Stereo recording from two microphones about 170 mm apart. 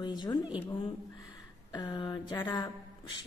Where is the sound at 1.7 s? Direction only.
25° left (ahead or behind).